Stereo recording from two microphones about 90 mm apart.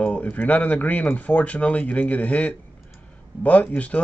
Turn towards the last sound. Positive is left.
turn(degrees=15)  # may be behind; listen again after turning